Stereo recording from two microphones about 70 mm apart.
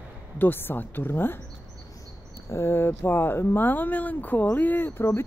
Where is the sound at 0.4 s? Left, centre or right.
Left.